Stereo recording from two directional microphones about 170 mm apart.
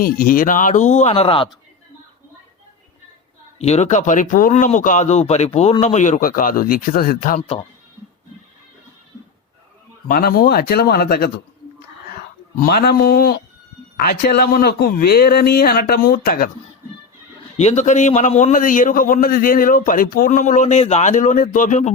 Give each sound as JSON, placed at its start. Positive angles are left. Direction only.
{"t": 0.0, "sound": "a man's voice", "side_deg": 55}
{"t": 3.6, "sound": "a man's voice", "side_deg": 40}
{"t": 10.1, "sound": "speech", "side_deg": 60}
{"t": 12.5, "sound": "speech", "side_deg": 65}
{"t": 17.6, "sound": "a man's voice", "side_deg": 40}